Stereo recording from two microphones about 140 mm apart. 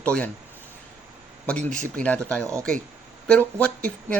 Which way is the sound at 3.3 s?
10° left (ahead or behind).